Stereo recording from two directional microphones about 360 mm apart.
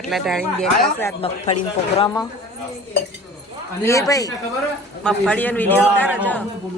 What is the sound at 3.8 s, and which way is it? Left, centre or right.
A man's voice, centre.